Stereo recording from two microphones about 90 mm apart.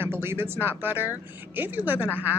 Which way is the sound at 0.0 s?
25° right (ahead or behind).